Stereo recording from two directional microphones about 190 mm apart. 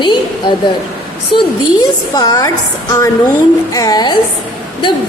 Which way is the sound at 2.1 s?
20° left (ahead or behind).